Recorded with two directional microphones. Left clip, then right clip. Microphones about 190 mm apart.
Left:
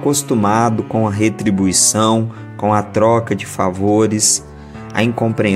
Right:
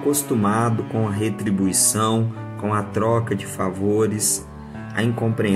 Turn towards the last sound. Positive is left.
turn(degrees=40)  # may be behind; listen again after turning